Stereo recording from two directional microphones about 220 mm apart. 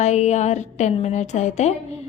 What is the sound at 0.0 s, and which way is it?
A woman's voice, 30° left (ahead or behind).